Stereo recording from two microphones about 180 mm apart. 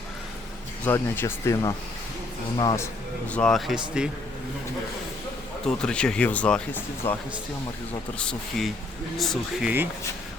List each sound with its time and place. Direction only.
0.9 s speech: 15° left (ahead or behind)
3.3 s speech: 5° left (ahead or behind)
5.6 s speech: 5° left (ahead or behind)
8.2 s speech: 5° left (ahead or behind)